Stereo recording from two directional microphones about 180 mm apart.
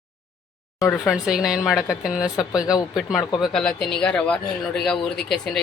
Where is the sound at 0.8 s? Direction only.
10° left (ahead or behind).